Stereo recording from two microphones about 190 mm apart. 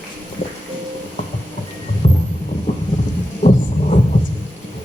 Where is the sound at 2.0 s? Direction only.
35° left (ahead or behind).